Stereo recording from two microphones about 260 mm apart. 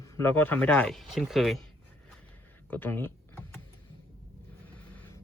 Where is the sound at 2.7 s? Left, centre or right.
Centre.